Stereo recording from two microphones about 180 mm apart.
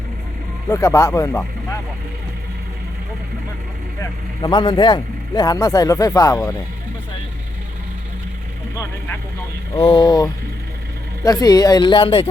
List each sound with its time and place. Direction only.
0.7 s speech: 15° left (ahead or behind)
4.0 s speech: 20° left (ahead or behind)
9.7 s speech: 30° left (ahead or behind)